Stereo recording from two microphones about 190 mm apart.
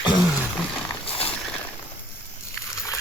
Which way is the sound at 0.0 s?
5° right (ahead or behind).